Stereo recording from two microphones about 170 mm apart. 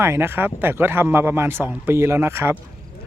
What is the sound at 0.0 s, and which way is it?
A man's voice, 15° right (ahead or behind).